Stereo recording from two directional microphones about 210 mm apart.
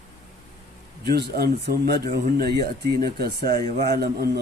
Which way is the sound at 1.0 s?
50° right (ahead or behind).